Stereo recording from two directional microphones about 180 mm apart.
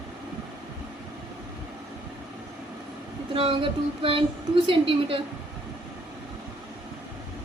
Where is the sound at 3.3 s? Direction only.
30° right (ahead or behind).